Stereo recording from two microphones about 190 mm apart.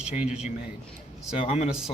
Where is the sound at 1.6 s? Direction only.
5° right (ahead or behind).